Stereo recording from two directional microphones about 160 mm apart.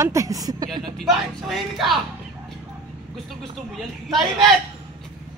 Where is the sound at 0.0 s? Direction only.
20° right (ahead or behind).